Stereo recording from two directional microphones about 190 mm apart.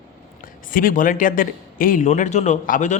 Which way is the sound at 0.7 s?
45° left (ahead or behind).